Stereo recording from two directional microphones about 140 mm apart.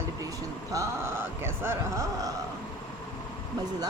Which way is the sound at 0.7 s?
25° right (ahead or behind).